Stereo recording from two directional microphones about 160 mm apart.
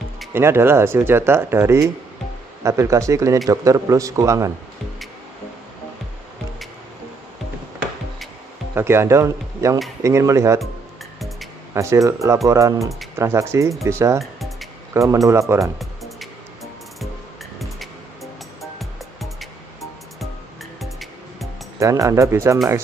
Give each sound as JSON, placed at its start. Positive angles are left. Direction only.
{"t": 0.3, "sound": "a man's voice", "side_deg": -15}
{"t": 8.7, "sound": "a man's voice", "side_deg": -15}
{"t": 11.1, "sound": "music", "side_deg": 0}
{"t": 11.7, "sound": "a man's voice", "side_deg": -20}
{"t": 14.2, "sound": "music", "side_deg": 0}
{"t": 15.0, "sound": "a man's voice", "side_deg": -20}
{"t": 15.8, "sound": "music", "side_deg": 0}
{"t": 17.6, "sound": "music", "side_deg": 0}
{"t": 20.8, "sound": "music", "side_deg": 0}
{"t": 21.7, "sound": "a man's voice", "side_deg": -20}